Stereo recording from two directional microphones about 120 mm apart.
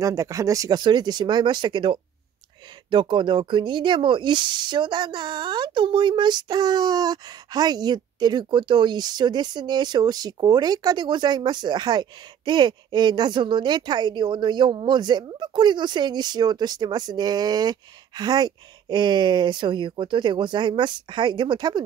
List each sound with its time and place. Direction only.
0.0 s speech: 30° right (ahead or behind)